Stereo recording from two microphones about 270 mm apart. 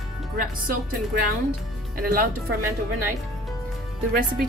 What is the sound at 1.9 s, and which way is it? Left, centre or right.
Speech, right.